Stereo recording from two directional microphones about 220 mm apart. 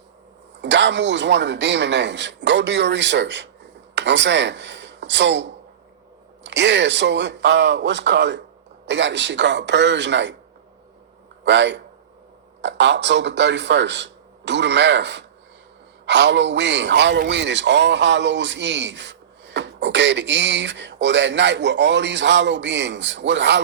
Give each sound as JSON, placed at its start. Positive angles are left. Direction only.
{"t": 0.6, "sound": "a man's voice", "side_deg": -55}
{"t": 11.4, "sound": "a man's voice", "side_deg": -50}